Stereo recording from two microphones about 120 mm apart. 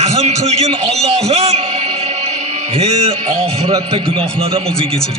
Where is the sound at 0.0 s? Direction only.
65° right (ahead or behind).